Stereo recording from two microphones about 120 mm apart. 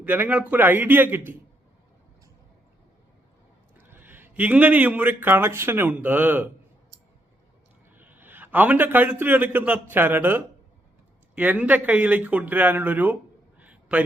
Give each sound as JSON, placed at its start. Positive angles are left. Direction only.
{"t": 0.0, "sound": "speech", "side_deg": -15}
{"t": 3.8, "sound": "speech", "side_deg": -15}
{"t": 7.9, "sound": "a man's voice", "side_deg": -15}
{"t": 13.6, "sound": "a sound", "side_deg": -10}